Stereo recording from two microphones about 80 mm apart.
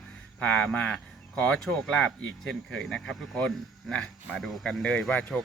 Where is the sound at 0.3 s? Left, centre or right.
Centre.